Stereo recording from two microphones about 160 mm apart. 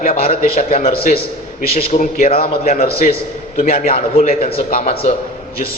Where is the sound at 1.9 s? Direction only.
60° left (ahead or behind).